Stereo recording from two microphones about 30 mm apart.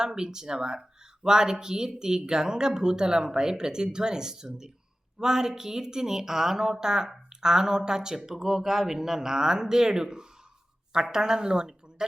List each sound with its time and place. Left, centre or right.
0.0 s speech: centre